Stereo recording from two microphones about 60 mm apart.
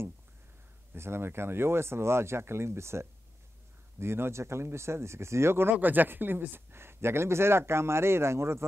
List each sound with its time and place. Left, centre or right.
0.9 s speech: right